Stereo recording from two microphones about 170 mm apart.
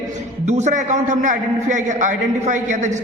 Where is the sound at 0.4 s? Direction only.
45° right (ahead or behind).